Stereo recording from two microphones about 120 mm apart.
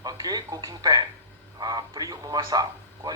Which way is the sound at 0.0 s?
35° right (ahead or behind).